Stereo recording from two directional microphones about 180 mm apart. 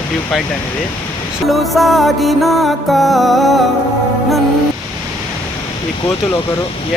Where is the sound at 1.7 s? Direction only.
Centre (ahead or behind).